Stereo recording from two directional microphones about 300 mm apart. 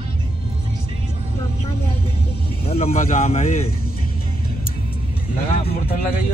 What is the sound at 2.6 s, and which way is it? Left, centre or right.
Speech, centre.